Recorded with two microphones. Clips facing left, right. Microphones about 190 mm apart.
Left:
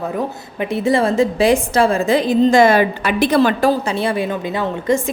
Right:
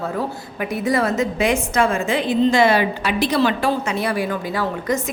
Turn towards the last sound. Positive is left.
turn(degrees=25)  # may be behind; listen again after turning